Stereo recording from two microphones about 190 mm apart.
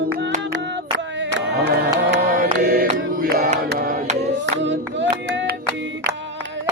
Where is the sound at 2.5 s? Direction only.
55° right (ahead or behind).